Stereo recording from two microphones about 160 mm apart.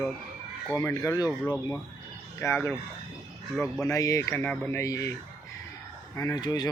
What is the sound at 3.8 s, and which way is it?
Speech, 20° left (ahead or behind).